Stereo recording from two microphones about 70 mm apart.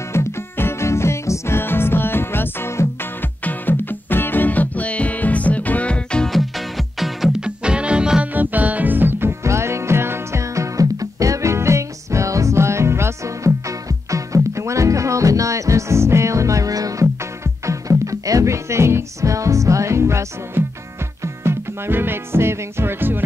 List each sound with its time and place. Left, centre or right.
0.1 s music: left; by 6.3 s centre
6.3 s music: centre
7.4 s music: centre
8.3 s music: right
9.4 s music: right
17.0 s music: right